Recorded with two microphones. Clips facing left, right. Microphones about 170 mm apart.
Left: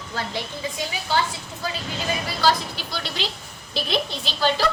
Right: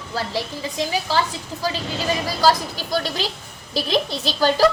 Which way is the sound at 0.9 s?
35° right (ahead or behind).